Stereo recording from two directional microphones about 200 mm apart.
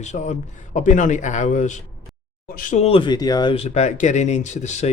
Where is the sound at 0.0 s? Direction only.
35° left (ahead or behind).